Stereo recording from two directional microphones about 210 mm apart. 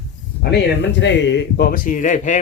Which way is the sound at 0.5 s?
55° left (ahead or behind).